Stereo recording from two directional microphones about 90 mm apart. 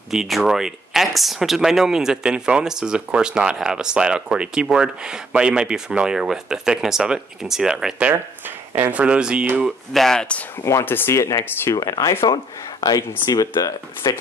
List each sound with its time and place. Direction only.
0.1 s speech: centre (ahead or behind)
8.1 s speech: 20° right (ahead or behind)
9.7 s speech: 5° left (ahead or behind)
10.6 s speech: 30° left (ahead or behind)
11.2 s speech: 40° left (ahead or behind)